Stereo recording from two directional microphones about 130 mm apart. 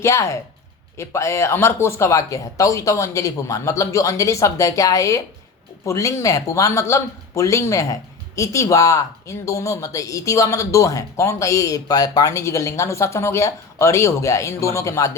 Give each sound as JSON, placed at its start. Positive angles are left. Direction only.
{"t": 0.0, "sound": "speech", "side_deg": 20}